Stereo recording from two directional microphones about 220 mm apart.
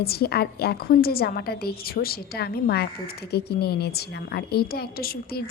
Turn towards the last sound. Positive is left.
turn(degrees=45)  # may be behind; listen again after turning